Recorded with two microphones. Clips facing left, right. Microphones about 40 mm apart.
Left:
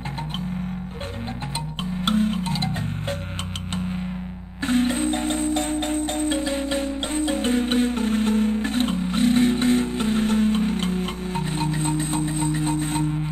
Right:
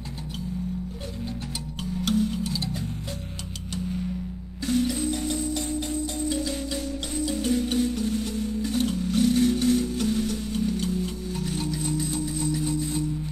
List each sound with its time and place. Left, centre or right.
2.0 s music: left
4.6 s music: left